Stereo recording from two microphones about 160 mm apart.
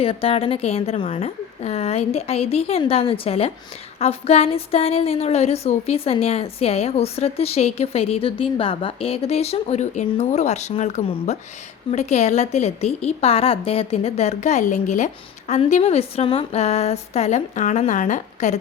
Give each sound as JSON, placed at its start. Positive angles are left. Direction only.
{"t": 0.0, "sound": "a woman's voice", "side_deg": 35}